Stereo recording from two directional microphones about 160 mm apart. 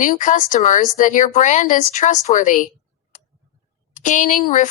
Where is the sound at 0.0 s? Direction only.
55° left (ahead or behind).